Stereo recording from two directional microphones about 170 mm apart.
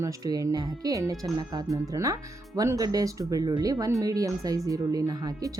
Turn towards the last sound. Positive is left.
turn(degrees=-20)  # may be behind; listen again after turning